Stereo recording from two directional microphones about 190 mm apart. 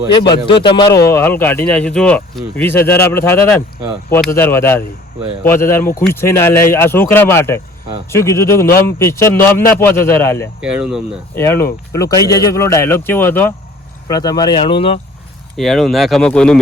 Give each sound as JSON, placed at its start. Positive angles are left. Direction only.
{"t": 0.2, "sound": "speech", "side_deg": 25}
{"t": 1.1, "sound": "speech", "side_deg": 10}
{"t": 10.6, "sound": "speech", "side_deg": -5}
{"t": 11.3, "sound": "speech", "side_deg": 15}
{"t": 15.5, "sound": "speech", "side_deg": 0}